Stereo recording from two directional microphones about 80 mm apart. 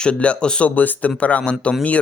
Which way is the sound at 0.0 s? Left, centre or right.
Centre.